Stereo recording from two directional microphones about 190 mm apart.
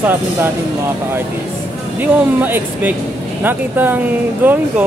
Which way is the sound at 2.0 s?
10° right (ahead or behind).